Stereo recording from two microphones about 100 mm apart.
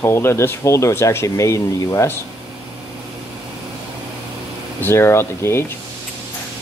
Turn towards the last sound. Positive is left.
turn(degrees=25)  # may be behind; listen again after turning